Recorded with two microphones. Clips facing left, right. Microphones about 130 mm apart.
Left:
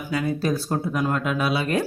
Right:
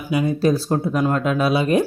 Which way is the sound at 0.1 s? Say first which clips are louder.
Right 6 dB; 20° right (ahead or behind).